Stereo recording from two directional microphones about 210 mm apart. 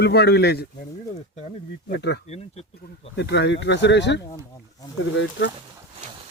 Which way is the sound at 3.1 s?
55° left (ahead or behind).